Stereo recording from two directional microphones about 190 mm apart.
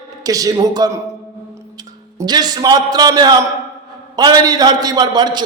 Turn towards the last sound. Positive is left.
turn(degrees=-20)  # may be behind; listen again after turning